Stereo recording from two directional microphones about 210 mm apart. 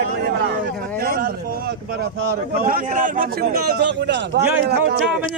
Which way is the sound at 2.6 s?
40° right (ahead or behind).